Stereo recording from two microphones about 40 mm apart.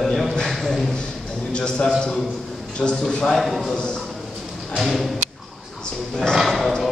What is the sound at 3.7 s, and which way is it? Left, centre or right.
Speech, centre.